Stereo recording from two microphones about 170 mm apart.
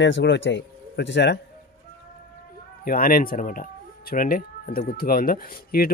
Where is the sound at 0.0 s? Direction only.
90° left.